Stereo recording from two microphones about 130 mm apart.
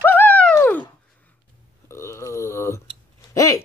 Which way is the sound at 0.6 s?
10° left (ahead or behind).